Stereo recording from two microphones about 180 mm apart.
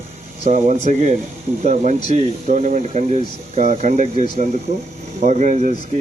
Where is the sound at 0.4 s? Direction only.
40° right (ahead or behind).